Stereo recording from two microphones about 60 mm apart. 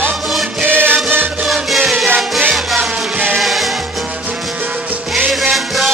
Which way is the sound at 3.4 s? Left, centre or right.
Centre.